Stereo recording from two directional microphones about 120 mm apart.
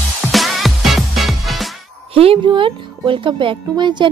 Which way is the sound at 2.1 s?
50° right (ahead or behind).